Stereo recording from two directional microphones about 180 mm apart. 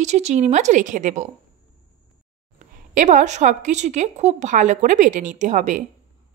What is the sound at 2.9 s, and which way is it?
Speech, 40° right (ahead or behind).